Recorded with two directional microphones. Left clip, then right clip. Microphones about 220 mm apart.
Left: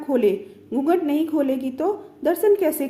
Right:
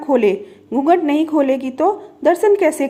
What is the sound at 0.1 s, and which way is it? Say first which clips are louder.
A woman's voice: right 5 dB; 20° right (ahead or behind).